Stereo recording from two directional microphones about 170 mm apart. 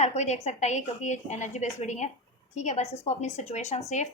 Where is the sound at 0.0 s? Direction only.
40° left (ahead or behind).